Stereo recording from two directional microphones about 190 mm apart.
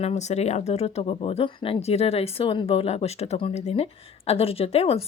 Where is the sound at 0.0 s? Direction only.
35° left (ahead or behind).